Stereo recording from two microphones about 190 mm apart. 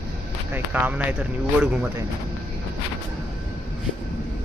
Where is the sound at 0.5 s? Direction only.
10° right (ahead or behind).